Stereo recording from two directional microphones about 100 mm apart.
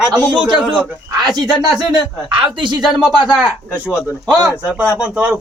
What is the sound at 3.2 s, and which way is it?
Speech, 10° right (ahead or behind).